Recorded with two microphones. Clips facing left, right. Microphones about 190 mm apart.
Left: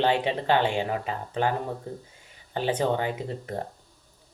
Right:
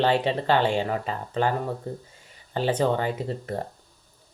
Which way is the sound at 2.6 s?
15° left (ahead or behind).